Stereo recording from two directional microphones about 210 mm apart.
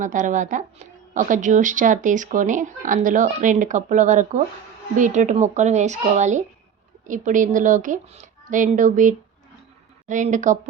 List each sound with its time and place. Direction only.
0.0 s speech: 35° right (ahead or behind)